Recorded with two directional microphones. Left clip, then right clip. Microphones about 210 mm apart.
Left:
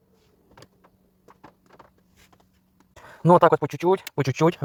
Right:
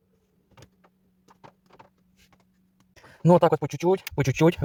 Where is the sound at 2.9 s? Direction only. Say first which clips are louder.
Left 3 dB; centre (ahead or behind).